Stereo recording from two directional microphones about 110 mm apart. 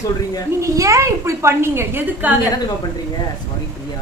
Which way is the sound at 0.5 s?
30° right (ahead or behind).